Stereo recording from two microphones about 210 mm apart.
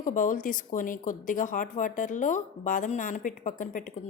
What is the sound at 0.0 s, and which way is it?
Speech, 40° left (ahead or behind).